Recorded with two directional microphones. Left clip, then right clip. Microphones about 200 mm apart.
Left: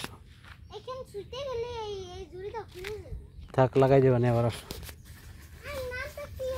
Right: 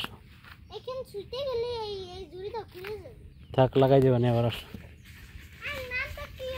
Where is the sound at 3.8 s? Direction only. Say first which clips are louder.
Left 1 dB; 15° right (ahead or behind).